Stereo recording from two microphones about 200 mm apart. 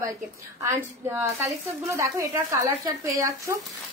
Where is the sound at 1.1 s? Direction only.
15° right (ahead or behind).